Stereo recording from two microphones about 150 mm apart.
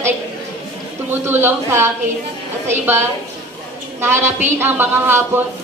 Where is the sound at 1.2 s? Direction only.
15° right (ahead or behind).